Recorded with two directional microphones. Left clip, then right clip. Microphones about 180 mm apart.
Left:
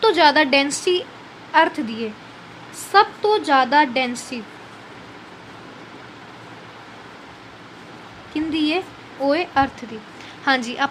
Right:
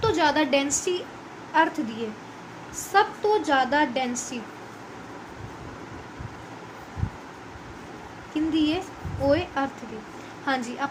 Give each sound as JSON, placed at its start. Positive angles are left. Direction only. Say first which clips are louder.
{"t": 0.0, "sound": "a woman's voice", "louder": "left 8 dB", "side_deg": 55}
{"t": 8.5, "sound": "a woman's voice", "louder": "left 5 dB", "side_deg": 50}